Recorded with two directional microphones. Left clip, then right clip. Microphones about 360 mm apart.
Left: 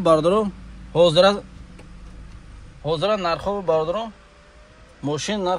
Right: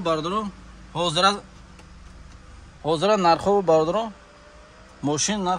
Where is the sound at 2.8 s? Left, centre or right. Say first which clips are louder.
Right 2 dB; centre.